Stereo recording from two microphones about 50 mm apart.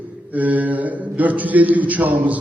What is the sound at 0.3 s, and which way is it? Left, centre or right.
A man's voice, right.